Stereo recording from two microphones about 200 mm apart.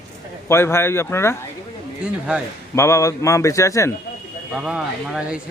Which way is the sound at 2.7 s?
15° left (ahead or behind).